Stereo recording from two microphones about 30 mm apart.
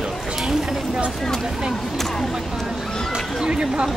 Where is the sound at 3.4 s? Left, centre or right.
Right.